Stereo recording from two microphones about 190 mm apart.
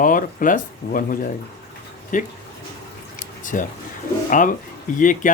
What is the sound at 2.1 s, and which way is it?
Speech, 45° left (ahead or behind).